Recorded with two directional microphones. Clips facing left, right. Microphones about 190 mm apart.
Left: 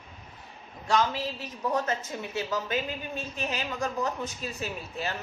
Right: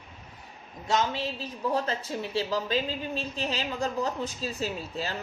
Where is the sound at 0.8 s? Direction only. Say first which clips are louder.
Left 1 dB; 25° right (ahead or behind).